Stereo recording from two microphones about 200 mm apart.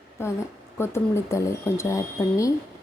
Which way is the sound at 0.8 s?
15° left (ahead or behind).